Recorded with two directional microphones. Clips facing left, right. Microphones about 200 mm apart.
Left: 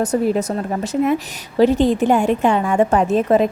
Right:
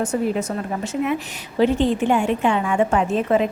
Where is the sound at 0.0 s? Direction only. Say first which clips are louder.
Left 4 dB; 35° left (ahead or behind).